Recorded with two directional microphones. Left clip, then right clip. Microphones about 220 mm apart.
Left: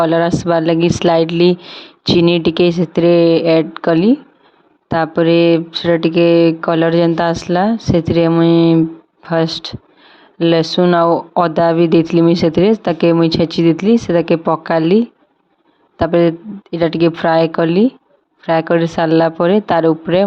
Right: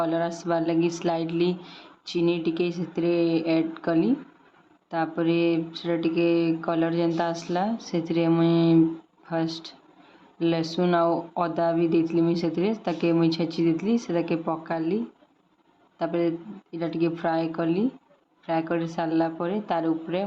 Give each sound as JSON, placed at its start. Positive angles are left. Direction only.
{"t": 0.0, "sound": "speech", "side_deg": 40}